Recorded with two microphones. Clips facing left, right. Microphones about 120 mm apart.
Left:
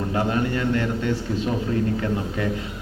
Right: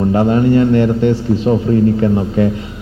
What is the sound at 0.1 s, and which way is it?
A man's voice, 35° right (ahead or behind).